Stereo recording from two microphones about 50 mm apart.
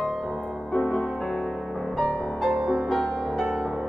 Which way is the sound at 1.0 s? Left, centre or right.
Centre.